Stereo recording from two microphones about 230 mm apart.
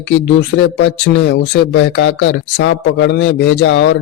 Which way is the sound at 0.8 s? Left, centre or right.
Left.